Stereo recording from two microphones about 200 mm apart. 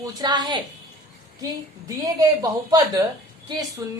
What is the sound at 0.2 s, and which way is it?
Speech, 20° right (ahead or behind).